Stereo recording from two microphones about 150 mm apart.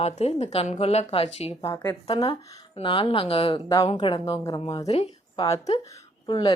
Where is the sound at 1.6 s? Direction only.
25° left (ahead or behind).